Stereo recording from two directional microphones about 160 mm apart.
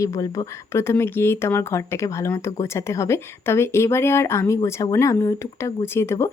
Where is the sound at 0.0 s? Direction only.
20° left (ahead or behind).